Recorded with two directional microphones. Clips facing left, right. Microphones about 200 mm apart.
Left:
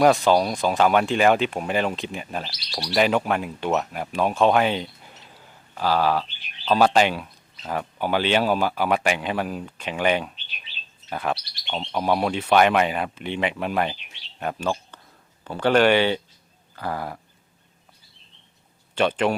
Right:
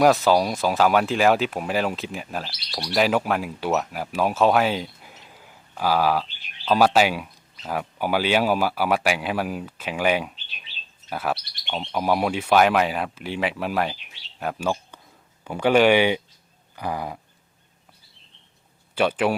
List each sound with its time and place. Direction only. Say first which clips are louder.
0.0 s speech: even; centre (ahead or behind)
16.7 s a sound: right 1 dB; 15° right (ahead or behind)
18.9 s speech: even; 10° right (ahead or behind)